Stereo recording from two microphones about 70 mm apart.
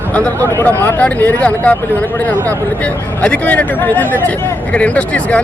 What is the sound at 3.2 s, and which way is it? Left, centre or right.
Speech, centre.